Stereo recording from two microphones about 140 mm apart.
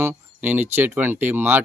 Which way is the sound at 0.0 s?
10° right (ahead or behind).